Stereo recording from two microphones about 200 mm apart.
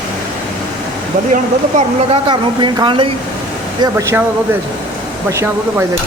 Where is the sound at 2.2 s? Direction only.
25° right (ahead or behind).